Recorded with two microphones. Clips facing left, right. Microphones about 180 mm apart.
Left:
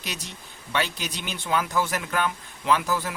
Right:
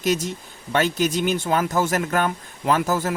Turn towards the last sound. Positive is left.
turn(degrees=-45)  # may be behind; listen again after turning